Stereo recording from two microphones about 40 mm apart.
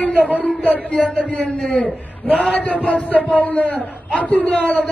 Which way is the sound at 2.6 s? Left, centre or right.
Left.